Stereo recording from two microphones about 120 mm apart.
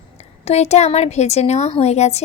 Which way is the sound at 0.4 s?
65° left (ahead or behind).